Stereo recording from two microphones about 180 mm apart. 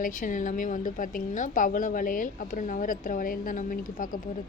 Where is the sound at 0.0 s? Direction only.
45° left (ahead or behind).